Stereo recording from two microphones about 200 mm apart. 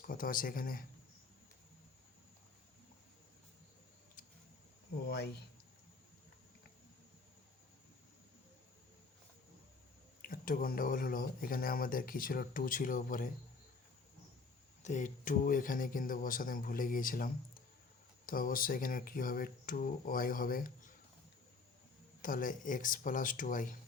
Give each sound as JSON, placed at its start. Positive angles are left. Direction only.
{"t": 0.0, "sound": "speech", "side_deg": 45}
{"t": 5.0, "sound": "speech", "side_deg": 55}
{"t": 10.2, "sound": "speech", "side_deg": 45}
{"t": 14.8, "sound": "speech", "side_deg": 40}
{"t": 22.2, "sound": "speech", "side_deg": 40}